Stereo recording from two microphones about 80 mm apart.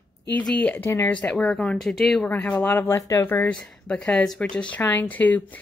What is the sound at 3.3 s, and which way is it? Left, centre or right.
Speech, left.